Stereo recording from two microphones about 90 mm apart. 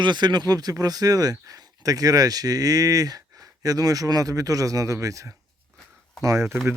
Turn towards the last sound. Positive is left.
turn(degrees=-35)  # may be behind; listen again after turning